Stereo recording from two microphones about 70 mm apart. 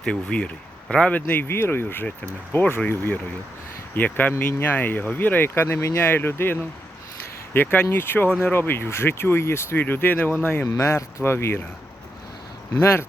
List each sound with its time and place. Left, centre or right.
0.0 s speech: centre
1.1 s speech: left
9.8 s speech: left
10.7 s speech: left
12.8 s speech: left